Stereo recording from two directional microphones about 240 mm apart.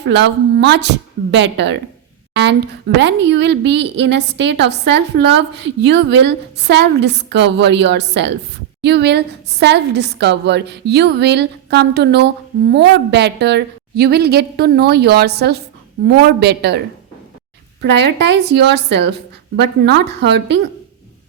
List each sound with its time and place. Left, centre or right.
0.0 s a woman's voice: right
17.8 s a woman's voice: right